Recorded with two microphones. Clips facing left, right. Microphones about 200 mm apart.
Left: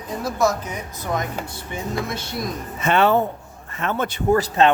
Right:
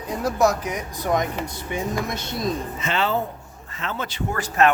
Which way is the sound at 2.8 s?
60° left (ahead or behind).